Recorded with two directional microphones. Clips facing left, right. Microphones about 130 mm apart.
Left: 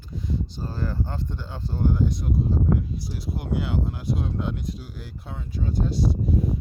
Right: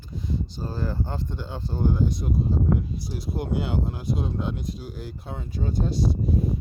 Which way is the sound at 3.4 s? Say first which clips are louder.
Even; 25° right (ahead or behind).